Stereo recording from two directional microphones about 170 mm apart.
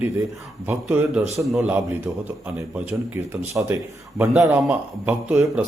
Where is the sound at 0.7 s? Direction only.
10° right (ahead or behind).